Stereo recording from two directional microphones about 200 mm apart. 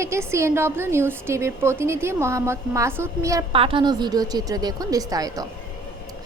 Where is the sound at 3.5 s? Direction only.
25° right (ahead or behind).